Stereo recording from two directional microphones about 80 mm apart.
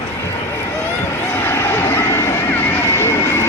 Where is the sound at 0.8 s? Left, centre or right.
Left.